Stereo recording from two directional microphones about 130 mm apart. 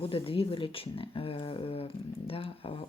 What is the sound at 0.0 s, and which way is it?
Speech, 45° left (ahead or behind).